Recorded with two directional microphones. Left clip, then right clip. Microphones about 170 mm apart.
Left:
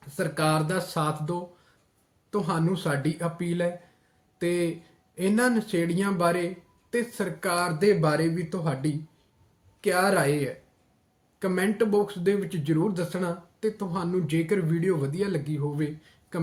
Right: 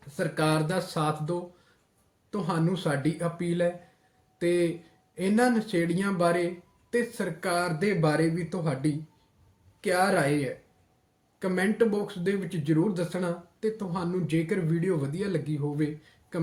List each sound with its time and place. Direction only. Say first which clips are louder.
0.2 s speech: left 1 dB; 10° left (ahead or behind)